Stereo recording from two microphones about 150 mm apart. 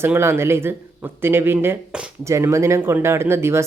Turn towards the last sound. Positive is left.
turn(degrees=-15)  # may be behind; listen again after turning